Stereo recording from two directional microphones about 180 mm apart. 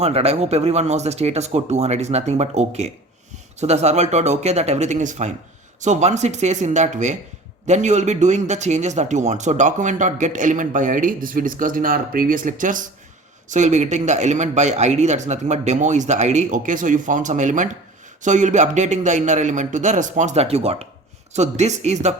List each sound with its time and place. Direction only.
0.0 s a man's voice: 35° right (ahead or behind)